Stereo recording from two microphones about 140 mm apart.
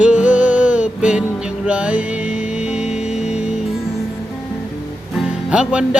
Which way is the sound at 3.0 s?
55° left (ahead or behind).